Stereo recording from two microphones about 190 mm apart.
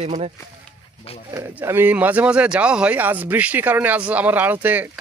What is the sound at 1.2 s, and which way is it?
Speech, 15° right (ahead or behind).